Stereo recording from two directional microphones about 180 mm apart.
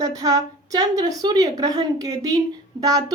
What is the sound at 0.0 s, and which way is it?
Speech, 20° right (ahead or behind).